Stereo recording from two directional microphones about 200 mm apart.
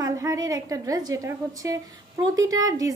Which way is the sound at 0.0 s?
15° right (ahead or behind).